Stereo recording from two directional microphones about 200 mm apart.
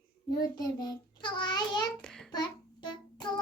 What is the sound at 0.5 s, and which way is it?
Child singing, 20° left (ahead or behind).